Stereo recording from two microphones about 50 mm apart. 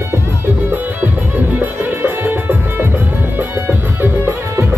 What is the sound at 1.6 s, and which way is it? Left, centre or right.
Music, right.